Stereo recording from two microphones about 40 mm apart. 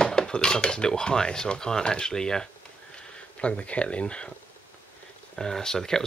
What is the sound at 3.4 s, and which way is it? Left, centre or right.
Speech, left.